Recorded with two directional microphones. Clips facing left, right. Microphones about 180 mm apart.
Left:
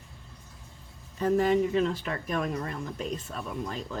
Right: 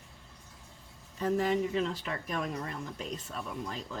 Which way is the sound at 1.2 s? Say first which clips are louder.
Left 5 dB; 55° left (ahead or behind).